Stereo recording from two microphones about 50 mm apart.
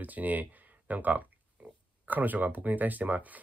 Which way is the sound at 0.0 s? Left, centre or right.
Right.